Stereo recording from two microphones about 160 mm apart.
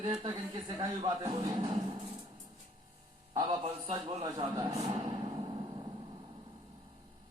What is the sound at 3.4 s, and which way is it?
A man's voice, 35° right (ahead or behind).